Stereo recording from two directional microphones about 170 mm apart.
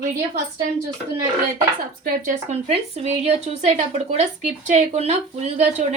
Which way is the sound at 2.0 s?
55° right (ahead or behind).